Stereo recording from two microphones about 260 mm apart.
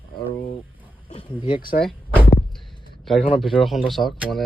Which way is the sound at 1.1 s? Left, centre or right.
Left.